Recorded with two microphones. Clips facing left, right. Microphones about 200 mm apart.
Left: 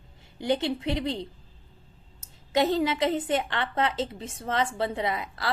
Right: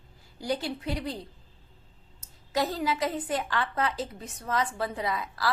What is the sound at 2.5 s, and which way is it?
A woman's voice, 25° left (ahead or behind).